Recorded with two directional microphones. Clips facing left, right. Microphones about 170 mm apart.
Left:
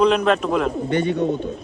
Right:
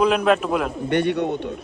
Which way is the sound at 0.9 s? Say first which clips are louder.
Right 1 dB; 65° right (ahead or behind).